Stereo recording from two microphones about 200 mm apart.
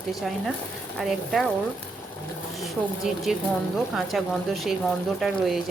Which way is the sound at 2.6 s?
Centre (ahead or behind).